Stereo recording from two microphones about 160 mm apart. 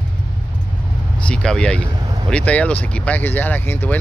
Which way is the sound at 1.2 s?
5° left (ahead or behind).